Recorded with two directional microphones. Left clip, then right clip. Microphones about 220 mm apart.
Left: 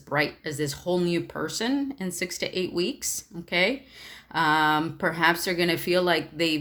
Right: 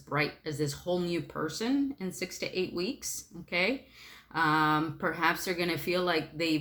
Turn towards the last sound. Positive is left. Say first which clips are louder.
# left 5 dB
turn(degrees=40)  # may be behind; listen again after turning